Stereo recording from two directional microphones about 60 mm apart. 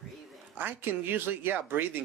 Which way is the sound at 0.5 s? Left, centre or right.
Right.